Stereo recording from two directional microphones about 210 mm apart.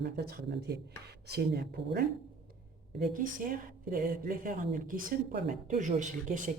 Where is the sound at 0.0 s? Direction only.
45° right (ahead or behind).